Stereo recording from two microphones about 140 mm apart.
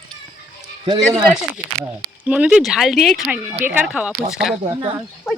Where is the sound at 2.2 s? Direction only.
10° right (ahead or behind).